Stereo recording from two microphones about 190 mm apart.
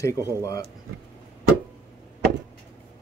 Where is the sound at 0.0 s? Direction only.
15° left (ahead or behind).